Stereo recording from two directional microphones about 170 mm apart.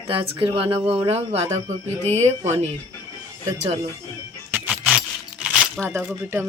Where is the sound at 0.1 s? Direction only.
30° right (ahead or behind).